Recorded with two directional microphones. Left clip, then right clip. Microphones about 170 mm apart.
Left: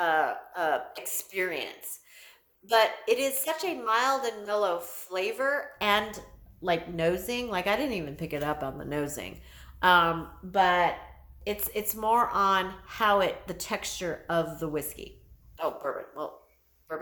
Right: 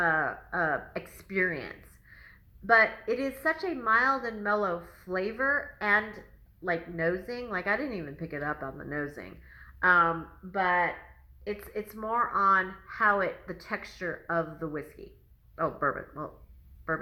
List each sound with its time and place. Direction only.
0.0 s a woman's voice: 25° left (ahead or behind)
2.8 s a woman's voice: 25° left (ahead or behind)